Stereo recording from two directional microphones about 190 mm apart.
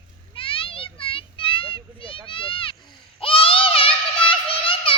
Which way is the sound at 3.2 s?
30° left (ahead or behind).